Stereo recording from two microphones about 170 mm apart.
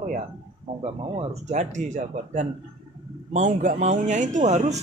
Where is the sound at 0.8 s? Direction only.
35° right (ahead or behind).